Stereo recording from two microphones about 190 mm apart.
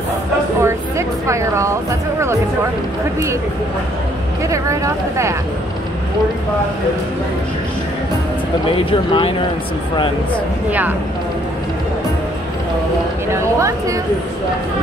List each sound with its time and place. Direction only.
0.6 s speech: 15° right (ahead or behind)
4.5 s speech: 15° right (ahead or behind)
8.6 s speech: 25° left (ahead or behind)
10.7 s speech: 10° right (ahead or behind)
13.3 s speech: 15° right (ahead or behind)